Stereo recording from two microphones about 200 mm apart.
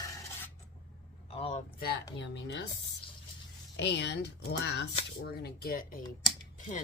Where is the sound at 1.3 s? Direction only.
30° left (ahead or behind).